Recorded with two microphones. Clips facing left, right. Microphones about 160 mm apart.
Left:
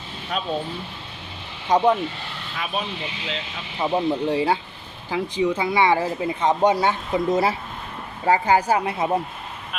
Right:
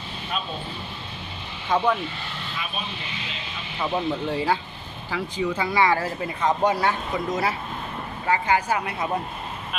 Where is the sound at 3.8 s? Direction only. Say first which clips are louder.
Left 4 dB; 20° left (ahead or behind).